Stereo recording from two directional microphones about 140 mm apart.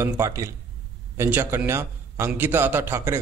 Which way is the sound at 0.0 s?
20° right (ahead or behind).